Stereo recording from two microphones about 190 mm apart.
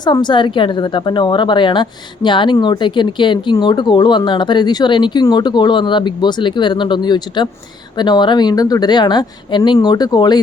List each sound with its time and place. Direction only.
0.0 s speech: 20° left (ahead or behind)